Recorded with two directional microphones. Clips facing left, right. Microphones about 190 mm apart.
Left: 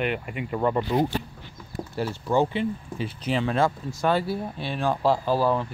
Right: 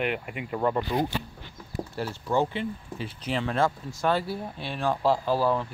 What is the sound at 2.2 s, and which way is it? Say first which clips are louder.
Speech: left 3 dB; 15° left (ahead or behind).